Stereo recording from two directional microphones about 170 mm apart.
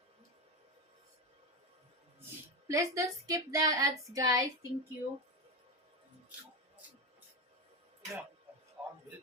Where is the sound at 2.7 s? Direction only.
20° right (ahead or behind).